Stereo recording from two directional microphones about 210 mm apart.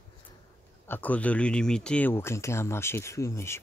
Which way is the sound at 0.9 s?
5° left (ahead or behind).